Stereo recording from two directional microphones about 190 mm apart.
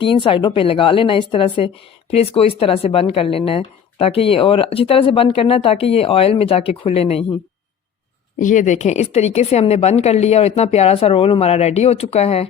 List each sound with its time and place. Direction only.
0.0 s a woman's voice: 25° left (ahead or behind)
8.4 s speech: 40° left (ahead or behind)